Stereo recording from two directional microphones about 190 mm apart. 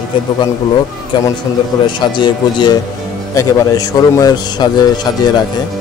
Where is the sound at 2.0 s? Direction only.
25° left (ahead or behind).